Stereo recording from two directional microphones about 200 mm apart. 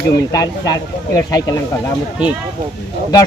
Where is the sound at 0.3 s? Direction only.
20° left (ahead or behind).